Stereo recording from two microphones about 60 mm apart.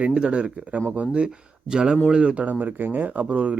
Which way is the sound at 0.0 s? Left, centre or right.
Centre.